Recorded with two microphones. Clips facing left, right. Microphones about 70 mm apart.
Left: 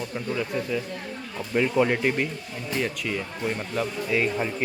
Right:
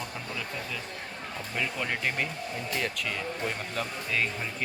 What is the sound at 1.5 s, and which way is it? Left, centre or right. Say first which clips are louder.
Speech: left 11 dB; left.